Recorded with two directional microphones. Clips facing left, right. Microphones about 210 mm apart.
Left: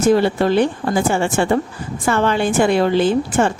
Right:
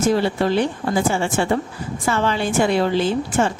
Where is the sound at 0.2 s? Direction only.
55° left (ahead or behind).